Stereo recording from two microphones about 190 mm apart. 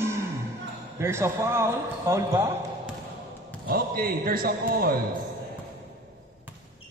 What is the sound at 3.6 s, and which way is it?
A man's voice, 50° right (ahead or behind).